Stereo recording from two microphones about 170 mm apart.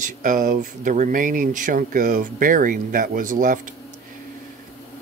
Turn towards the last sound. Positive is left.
turn(degrees=-50)  # may be behind; listen again after turning